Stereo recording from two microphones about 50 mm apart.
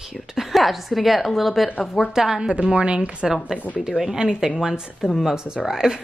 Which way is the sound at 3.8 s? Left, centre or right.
Centre.